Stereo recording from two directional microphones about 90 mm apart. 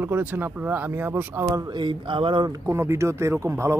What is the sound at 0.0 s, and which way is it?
Speech, 20° right (ahead or behind).